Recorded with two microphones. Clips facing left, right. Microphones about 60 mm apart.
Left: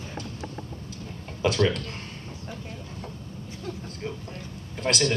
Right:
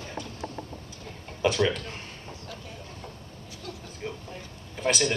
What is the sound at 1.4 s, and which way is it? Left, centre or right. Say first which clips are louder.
Speech: left 1 dB; centre.